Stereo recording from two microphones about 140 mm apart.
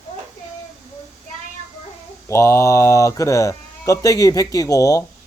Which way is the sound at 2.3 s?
20° left (ahead or behind).